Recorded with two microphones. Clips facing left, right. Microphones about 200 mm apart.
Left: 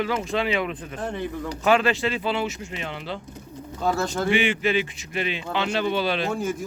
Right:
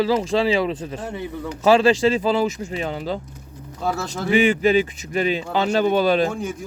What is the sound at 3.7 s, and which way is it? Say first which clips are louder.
Speech: left 1 dB; 5° right (ahead or behind).